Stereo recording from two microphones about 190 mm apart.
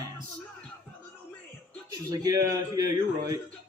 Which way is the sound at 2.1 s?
20° right (ahead or behind).